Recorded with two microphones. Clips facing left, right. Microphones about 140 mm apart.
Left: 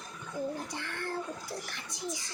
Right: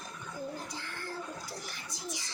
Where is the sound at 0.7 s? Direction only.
65° left (ahead or behind).